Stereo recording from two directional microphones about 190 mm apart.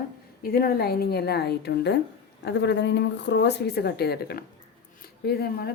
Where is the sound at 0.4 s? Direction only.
50° left (ahead or behind).